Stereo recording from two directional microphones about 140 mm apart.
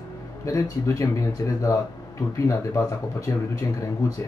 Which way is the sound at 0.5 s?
20° left (ahead or behind).